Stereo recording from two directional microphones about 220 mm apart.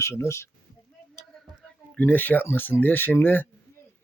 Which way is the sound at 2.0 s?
10° left (ahead or behind).